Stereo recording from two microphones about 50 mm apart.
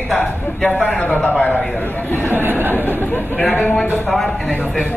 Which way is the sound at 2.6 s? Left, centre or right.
Right.